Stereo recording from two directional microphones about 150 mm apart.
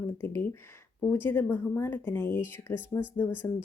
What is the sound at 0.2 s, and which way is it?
Speech, 10° left (ahead or behind).